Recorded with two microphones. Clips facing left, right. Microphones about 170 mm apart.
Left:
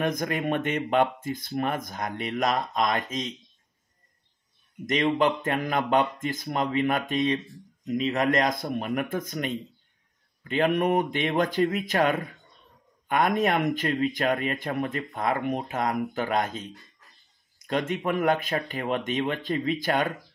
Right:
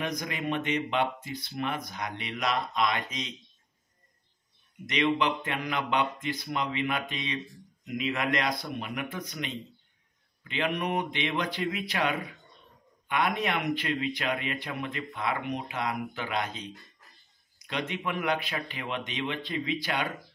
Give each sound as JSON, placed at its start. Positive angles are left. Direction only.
{"t": 0.0, "sound": "speech", "side_deg": 50}
{"t": 4.8, "sound": "speech", "side_deg": 45}